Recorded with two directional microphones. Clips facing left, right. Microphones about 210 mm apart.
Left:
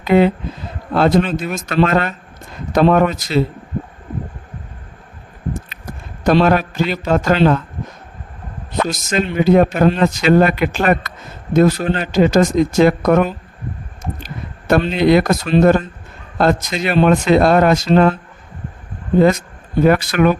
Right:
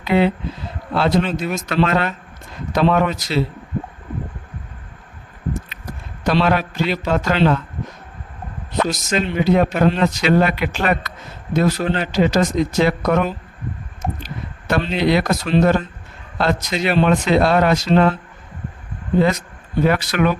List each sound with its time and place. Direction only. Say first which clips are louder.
0.0 s speech: left 4 dB; 45° left (ahead or behind)
6.2 s speech: left 4 dB; 45° left (ahead or behind)
9.0 s speech: left 5 dB; 45° left (ahead or behind)
19.8 s speech: left 4 dB; 50° left (ahead or behind)